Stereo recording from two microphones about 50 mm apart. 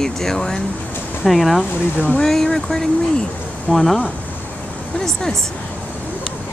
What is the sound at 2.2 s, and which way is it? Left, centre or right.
Speech, centre.